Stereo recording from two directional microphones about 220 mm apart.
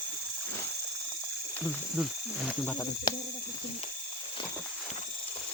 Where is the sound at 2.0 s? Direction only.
Centre (ahead or behind).